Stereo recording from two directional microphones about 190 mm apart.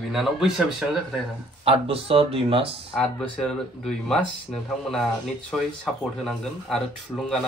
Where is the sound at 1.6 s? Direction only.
30° right (ahead or behind).